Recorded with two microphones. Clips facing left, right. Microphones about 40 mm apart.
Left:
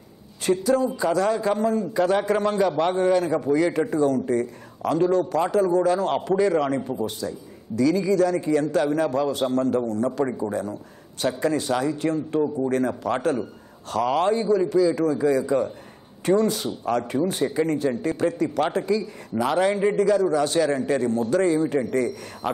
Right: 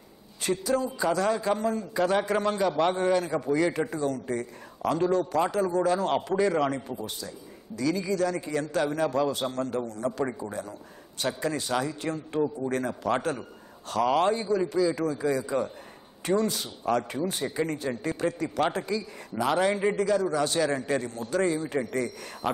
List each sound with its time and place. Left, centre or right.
0.7 s a man's voice: centre
6.9 s a man's voice: left
7.8 s a man's voice: centre
11.5 s a man's voice: centre